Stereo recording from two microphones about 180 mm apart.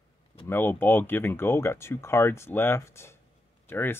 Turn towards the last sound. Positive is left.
turn(degrees=10)  # may be behind; listen again after turning